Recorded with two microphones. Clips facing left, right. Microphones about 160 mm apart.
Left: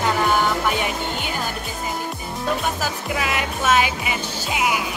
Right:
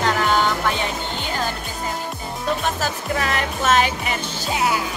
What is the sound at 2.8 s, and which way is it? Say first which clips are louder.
Speech: right 1 dB; 10° left (ahead or behind).